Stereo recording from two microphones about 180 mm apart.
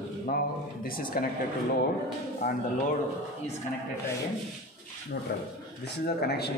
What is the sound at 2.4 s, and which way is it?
Speech, 55° left (ahead or behind).